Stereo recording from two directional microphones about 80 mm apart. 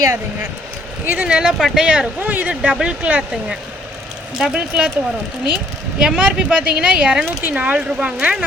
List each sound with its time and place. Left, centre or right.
1.0 s speech: centre
2.2 s speech: right
2.6 s speech: centre
6.0 s speech: centre